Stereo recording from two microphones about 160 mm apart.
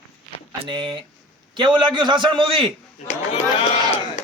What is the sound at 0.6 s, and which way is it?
A man's voice, 30° right (ahead or behind).